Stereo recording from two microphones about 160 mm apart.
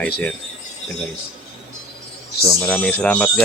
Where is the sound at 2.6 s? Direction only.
5° left (ahead or behind).